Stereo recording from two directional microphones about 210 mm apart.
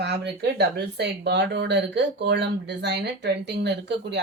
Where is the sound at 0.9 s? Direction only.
55° right (ahead or behind).